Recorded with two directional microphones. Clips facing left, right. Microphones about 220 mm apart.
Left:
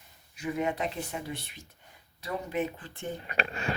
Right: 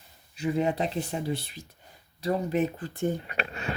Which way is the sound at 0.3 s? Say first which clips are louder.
Right 4 dB; 30° right (ahead or behind).